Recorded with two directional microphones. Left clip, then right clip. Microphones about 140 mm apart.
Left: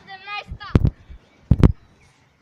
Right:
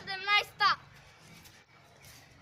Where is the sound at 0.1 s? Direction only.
40° right (ahead or behind).